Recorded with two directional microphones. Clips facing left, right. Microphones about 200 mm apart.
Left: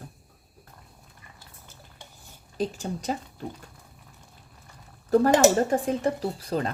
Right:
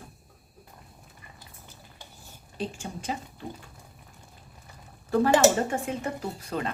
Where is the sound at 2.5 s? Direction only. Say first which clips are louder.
Left 5 dB; 40° left (ahead or behind).